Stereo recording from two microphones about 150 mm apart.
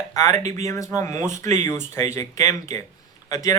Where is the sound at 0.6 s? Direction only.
20° left (ahead or behind).